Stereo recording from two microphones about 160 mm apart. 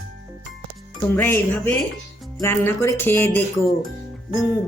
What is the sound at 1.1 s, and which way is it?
A man's voice, 15° left (ahead or behind).